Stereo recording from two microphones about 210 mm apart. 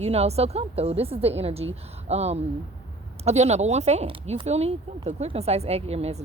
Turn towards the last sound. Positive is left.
turn(degrees=-30)  # may be behind; listen again after turning